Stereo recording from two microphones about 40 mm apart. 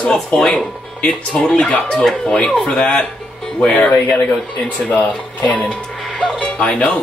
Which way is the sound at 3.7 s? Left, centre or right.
Left.